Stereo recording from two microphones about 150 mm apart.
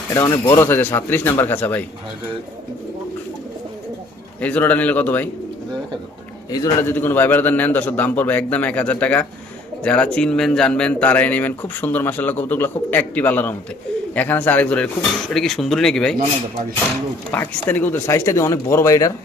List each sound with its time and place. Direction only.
0.1 s a man's voice: 20° left (ahead or behind)
4.4 s a man's voice: 10° left (ahead or behind)
6.5 s a man's voice: 20° left (ahead or behind); by 16.1 s 5° left (ahead or behind)
17.3 s a man's voice: 10° left (ahead or behind)